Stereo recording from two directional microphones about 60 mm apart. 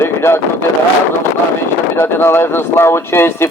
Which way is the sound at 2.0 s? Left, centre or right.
Left.